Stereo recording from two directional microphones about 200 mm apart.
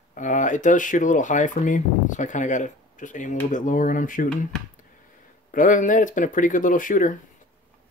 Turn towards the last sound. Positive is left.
turn(degrees=40)  # may be behind; listen again after turning